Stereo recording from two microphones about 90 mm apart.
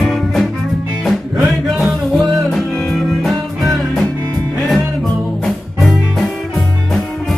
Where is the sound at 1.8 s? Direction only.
Centre (ahead or behind).